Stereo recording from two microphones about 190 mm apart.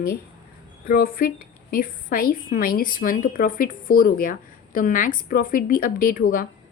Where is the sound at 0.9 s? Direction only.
50° left (ahead or behind).